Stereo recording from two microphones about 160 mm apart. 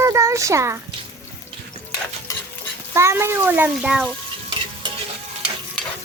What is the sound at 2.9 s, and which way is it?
A child's voice, 15° right (ahead or behind).